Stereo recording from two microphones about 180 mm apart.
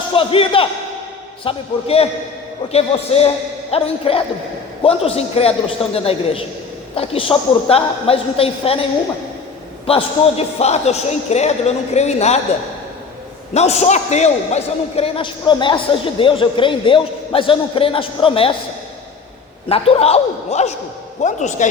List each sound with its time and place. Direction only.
0.1 s a man's voice: 30° left (ahead or behind)
13.5 s a man's voice: 35° left (ahead or behind)
19.6 s a man's voice: 30° left (ahead or behind)